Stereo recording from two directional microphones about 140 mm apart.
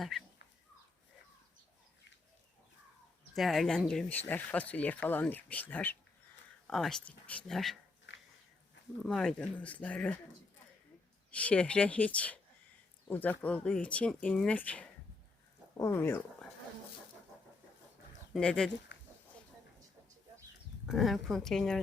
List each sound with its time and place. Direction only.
0.1 s speech: centre (ahead or behind)
3.3 s speech: centre (ahead or behind)
6.7 s speech: centre (ahead or behind)
9.0 s speech: 5° left (ahead or behind)
11.3 s speech: 10° left (ahead or behind)
18.3 s speech: 5° left (ahead or behind)
20.8 s speech: centre (ahead or behind)